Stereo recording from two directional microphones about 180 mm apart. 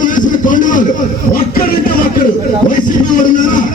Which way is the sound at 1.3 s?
50° left (ahead or behind).